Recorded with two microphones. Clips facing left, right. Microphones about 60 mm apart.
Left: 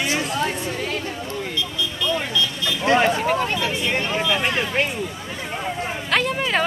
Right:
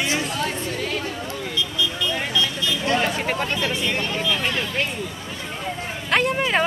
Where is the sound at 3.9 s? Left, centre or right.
Left.